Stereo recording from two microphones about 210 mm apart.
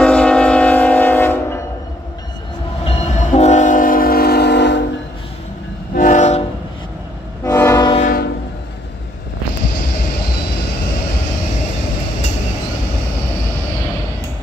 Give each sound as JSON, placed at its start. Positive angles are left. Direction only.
{"t": 0.0, "sound": "train", "side_deg": 5}
{"t": 2.8, "sound": "train", "side_deg": 30}
{"t": 5.9, "sound": "train", "side_deg": 35}
{"t": 7.4, "sound": "train", "side_deg": 10}
{"t": 8.0, "sound": "train", "side_deg": 45}